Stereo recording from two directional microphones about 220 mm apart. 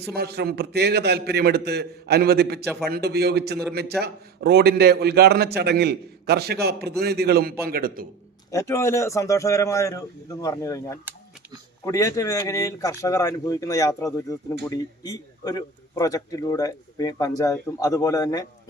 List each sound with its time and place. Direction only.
0.1 s a man's voice: 45° right (ahead or behind)
8.4 s a man's voice: 15° left (ahead or behind)